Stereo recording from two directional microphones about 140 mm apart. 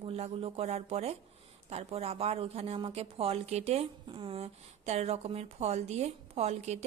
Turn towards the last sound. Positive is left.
turn(degrees=-50)  # may be behind; listen again after turning